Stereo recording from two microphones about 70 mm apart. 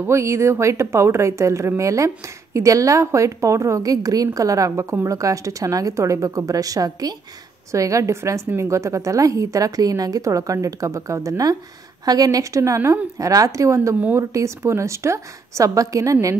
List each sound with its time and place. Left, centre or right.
0.1 s a woman's voice: right
7.7 s a woman's voice: right
12.0 s a woman's voice: right
14.1 s a woman's voice: right